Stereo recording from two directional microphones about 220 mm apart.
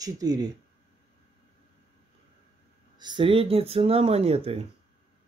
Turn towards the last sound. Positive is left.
turn(degrees=-25)  # may be behind; listen again after turning